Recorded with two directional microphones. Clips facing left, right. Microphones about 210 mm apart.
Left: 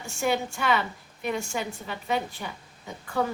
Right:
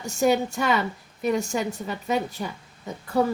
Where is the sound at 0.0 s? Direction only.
40° right (ahead or behind).